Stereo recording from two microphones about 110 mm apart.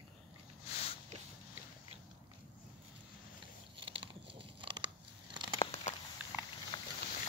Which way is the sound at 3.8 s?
50° right (ahead or behind).